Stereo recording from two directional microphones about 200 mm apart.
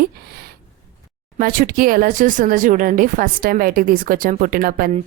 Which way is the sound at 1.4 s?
45° right (ahead or behind).